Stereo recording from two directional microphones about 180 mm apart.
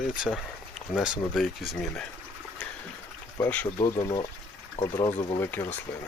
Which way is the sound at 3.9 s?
25° left (ahead or behind).